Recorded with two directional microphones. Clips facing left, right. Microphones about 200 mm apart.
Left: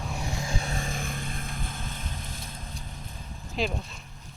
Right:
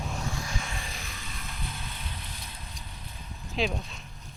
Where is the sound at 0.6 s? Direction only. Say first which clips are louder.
Left 6 dB; 40° left (ahead or behind).